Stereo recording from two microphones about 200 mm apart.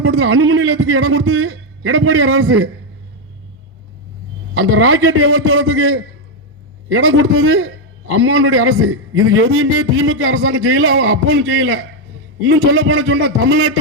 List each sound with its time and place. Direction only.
0.0 s a man's voice: 90° right
4.5 s a man's voice: 90° right